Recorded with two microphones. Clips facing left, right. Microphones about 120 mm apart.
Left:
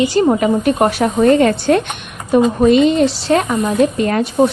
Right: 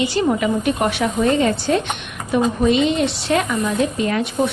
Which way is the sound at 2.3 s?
40° left (ahead or behind).